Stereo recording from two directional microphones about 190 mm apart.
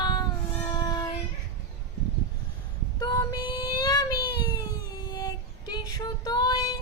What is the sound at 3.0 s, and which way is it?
Child singing, 20° left (ahead or behind).